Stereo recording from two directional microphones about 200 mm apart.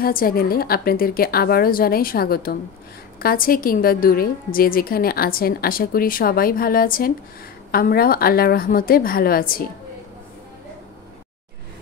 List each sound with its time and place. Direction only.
0.0 s a woman's voice: 45° left (ahead or behind)